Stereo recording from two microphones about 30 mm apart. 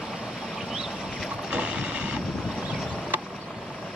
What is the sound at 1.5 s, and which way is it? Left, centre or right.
Vehicle, right.